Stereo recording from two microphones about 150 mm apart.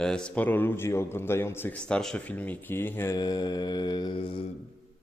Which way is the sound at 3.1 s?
25° left (ahead or behind).